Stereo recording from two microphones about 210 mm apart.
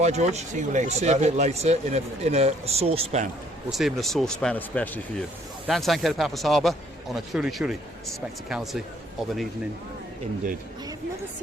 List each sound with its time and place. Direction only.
0.0 s speech: 30° right (ahead or behind)
3.7 s speech: centre (ahead or behind)